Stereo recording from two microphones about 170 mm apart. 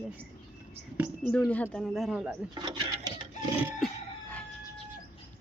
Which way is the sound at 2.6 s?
25° right (ahead or behind).